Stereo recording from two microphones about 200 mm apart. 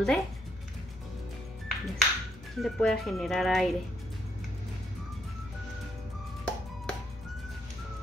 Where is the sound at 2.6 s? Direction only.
Centre (ahead or behind).